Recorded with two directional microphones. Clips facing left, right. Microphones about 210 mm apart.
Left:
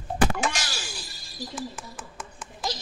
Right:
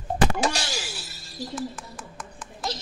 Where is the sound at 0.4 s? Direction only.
35° right (ahead or behind).